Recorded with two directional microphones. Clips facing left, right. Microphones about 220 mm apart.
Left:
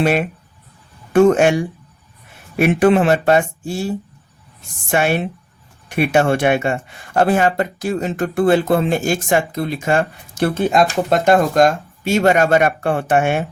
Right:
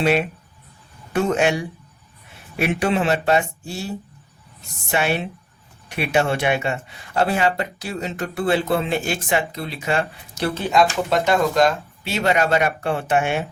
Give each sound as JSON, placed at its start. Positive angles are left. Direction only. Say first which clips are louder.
{"t": 0.0, "sound": "speech", "louder": "left 2 dB", "side_deg": 50}
{"t": 2.6, "sound": "speech", "louder": "left 7 dB", "side_deg": 50}